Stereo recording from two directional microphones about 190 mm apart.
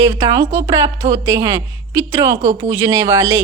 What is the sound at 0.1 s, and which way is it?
A woman's voice, 15° right (ahead or behind).